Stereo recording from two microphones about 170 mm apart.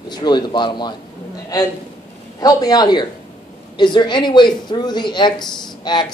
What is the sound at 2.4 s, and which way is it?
Speech, 20° left (ahead or behind).